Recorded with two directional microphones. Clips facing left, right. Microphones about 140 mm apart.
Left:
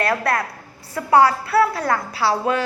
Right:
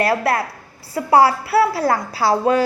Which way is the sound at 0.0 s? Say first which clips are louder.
Right 3 dB; 30° right (ahead or behind).